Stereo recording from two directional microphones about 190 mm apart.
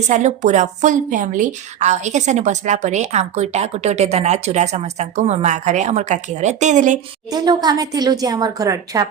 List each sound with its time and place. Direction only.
0.1 s a woman's voice: 40° right (ahead or behind)
7.3 s a woman's voice: 20° right (ahead or behind)